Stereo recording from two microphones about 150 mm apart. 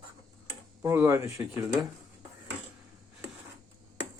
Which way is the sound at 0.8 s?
20° right (ahead or behind).